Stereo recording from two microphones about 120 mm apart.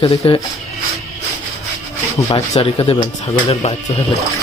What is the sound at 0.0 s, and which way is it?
Speech, 45° left (ahead or behind).